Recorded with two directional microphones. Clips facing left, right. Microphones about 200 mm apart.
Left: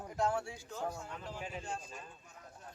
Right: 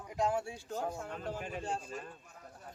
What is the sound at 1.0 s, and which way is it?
Speech, 55° right (ahead or behind).